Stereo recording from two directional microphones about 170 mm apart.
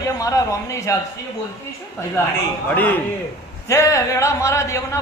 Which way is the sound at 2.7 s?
10° left (ahead or behind).